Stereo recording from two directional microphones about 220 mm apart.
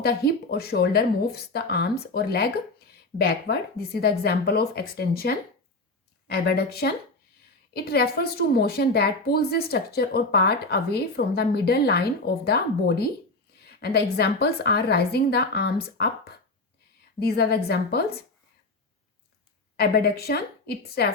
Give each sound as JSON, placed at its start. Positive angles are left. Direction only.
{"t": 0.0, "sound": "speech", "side_deg": 45}
{"t": 17.2, "sound": "speech", "side_deg": 45}
{"t": 19.7, "sound": "speech", "side_deg": 45}